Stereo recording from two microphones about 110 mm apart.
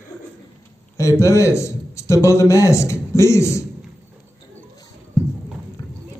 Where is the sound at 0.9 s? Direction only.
30° left (ahead or behind).